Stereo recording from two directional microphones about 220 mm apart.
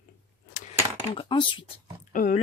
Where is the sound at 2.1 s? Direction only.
40° left (ahead or behind).